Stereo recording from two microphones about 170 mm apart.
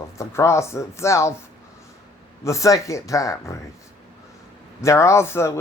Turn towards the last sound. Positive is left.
turn(degrees=15)  # may be behind; listen again after turning